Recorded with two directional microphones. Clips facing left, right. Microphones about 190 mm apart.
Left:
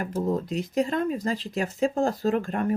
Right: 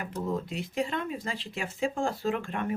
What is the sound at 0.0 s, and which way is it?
Speech, 40° left (ahead or behind).